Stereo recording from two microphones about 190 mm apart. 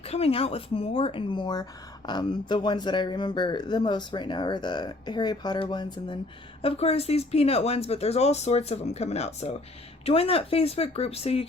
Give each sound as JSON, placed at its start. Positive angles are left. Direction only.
{"t": 0.0, "sound": "speech", "side_deg": 30}